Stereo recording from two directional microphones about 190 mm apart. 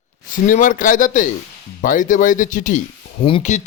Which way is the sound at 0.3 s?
45° left (ahead or behind).